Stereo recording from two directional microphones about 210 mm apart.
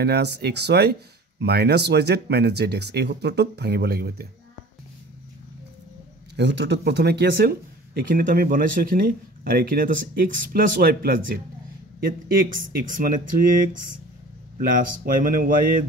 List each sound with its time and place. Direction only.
0.0 s speech: 50° right (ahead or behind)
6.3 s speech: 55° right (ahead or behind); by 13.3 s 40° right (ahead or behind)
14.7 s speech: 40° right (ahead or behind)